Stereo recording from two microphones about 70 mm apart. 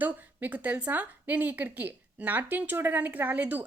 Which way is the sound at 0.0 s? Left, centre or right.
Right.